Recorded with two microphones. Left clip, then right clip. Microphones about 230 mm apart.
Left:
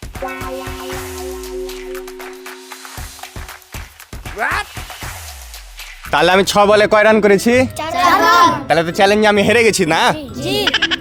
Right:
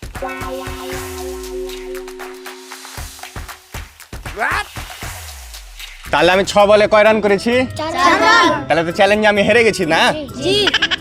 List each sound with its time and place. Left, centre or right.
0.3 s music: centre
4.4 s speech: centre
6.1 s speech: left
10.7 s goat: centre